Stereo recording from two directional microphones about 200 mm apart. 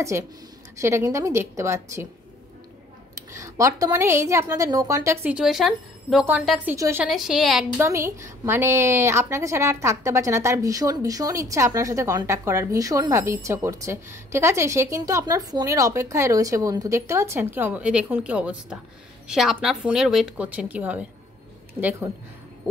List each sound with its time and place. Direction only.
0.1 s a woman's voice: 10° right (ahead or behind)
3.2 s a woman's voice: 15° right (ahead or behind)
7.7 s a woman's voice: 15° right (ahead or behind)